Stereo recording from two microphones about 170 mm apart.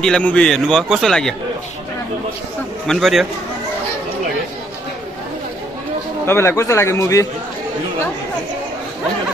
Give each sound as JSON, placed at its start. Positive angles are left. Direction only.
{"t": 0.0, "sound": "a man's voice", "side_deg": 5}
{"t": 2.9, "sound": "a man's voice", "side_deg": 0}
{"t": 6.2, "sound": "a man's voice", "side_deg": 15}